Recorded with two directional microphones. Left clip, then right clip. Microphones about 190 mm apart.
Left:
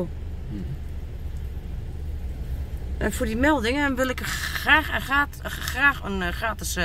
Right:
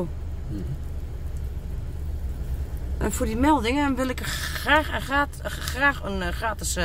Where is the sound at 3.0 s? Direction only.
10° right (ahead or behind).